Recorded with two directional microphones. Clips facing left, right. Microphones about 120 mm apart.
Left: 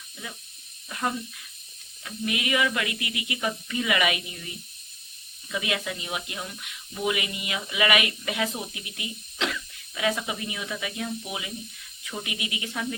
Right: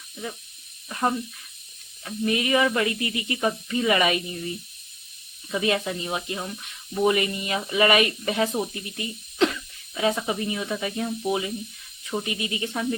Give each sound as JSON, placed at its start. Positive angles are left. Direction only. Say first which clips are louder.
{"t": 0.9, "sound": "speech", "louder": "right 4 dB", "side_deg": -30}